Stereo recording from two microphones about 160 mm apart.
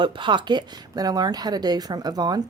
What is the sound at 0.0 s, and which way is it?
Speech, 30° right (ahead or behind).